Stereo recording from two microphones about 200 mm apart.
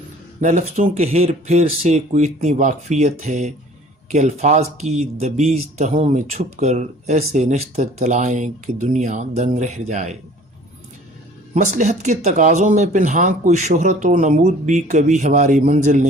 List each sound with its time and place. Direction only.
0.4 s speech: 35° right (ahead or behind)
11.5 s speech: 35° right (ahead or behind)